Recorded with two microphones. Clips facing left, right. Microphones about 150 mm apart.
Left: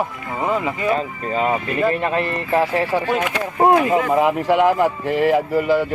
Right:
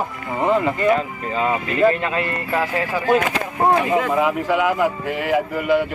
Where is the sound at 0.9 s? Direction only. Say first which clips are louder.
Even; 30° left (ahead or behind).